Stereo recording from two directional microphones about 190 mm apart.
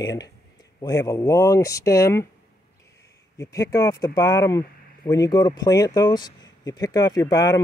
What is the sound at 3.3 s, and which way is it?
Speech, 15° left (ahead or behind).